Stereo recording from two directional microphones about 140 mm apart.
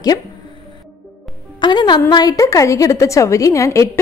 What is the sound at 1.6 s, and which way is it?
A woman's voice, 35° left (ahead or behind).